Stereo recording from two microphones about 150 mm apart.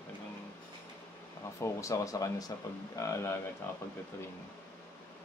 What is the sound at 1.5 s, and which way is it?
Speech, 20° left (ahead or behind).